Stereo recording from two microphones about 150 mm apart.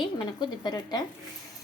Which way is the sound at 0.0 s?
30° left (ahead or behind).